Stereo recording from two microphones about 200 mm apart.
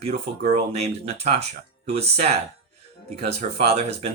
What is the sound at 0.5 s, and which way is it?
Speech, 30° right (ahead or behind).